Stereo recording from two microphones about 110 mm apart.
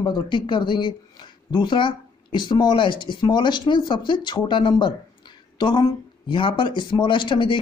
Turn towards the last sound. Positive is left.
turn(degrees=45)  # may be behind; listen again after turning